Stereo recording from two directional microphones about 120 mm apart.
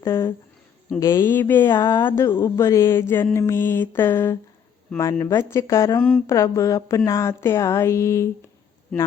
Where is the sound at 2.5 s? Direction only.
25° left (ahead or behind).